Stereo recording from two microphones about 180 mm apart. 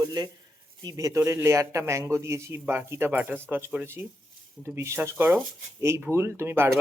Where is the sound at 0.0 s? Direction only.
20° right (ahead or behind).